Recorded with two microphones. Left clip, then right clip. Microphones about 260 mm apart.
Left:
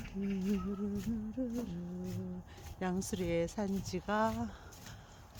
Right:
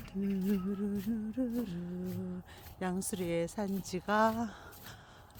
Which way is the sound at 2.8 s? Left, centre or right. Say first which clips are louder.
Right 1 dB; centre.